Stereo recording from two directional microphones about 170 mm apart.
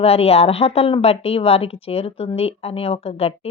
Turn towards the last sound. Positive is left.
turn(degrees=35)  # may be behind; listen again after turning